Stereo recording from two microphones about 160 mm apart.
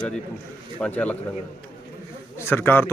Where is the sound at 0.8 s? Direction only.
10° left (ahead or behind).